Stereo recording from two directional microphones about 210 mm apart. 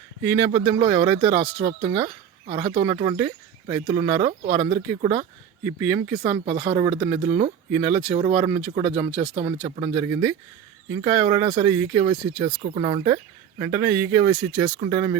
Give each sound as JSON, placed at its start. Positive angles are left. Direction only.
{"t": 0.2, "sound": "speech", "side_deg": -15}
{"t": 6.3, "sound": "speech", "side_deg": -30}